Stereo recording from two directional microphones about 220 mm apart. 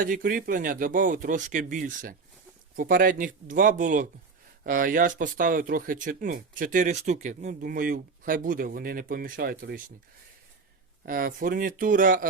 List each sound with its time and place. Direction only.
0.0 s speech: 40° right (ahead or behind)
11.0 s speech: 40° right (ahead or behind)